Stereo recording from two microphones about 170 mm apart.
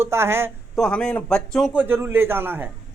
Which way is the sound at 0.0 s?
15° right (ahead or behind).